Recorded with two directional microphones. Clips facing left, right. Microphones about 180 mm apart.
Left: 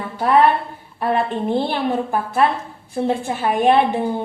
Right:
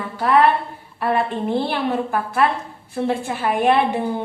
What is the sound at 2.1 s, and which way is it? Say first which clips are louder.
A woman's voice: left 1 dB; 20° left (ahead or behind).